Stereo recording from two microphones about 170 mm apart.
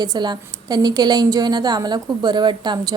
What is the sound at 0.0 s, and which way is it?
A woman's voice, 25° right (ahead or behind).